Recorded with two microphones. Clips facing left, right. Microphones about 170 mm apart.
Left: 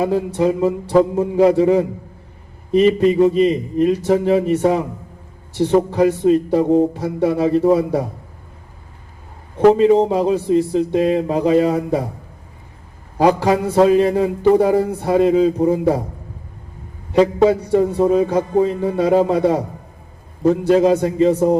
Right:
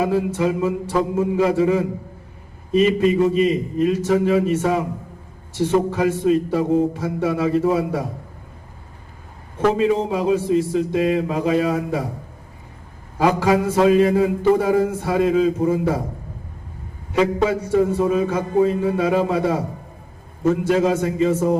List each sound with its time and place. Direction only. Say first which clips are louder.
0.0 s a man's voice: left 2 dB; 35° left (ahead or behind)
9.7 s a man's voice: left 6 dB; 35° left (ahead or behind)
13.1 s a man's voice: left 2 dB; 35° left (ahead or behind)
17.2 s a man's voice: left 5 dB; 35° left (ahead or behind)